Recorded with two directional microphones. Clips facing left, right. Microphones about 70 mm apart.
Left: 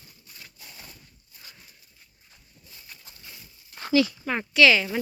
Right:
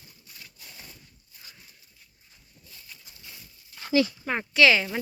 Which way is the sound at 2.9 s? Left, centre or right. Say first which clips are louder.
Left 1 dB; left.